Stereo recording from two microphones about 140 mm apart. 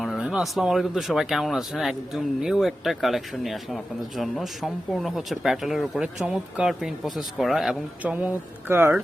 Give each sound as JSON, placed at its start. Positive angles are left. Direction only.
{"t": 0.0, "sound": "speech", "side_deg": 0}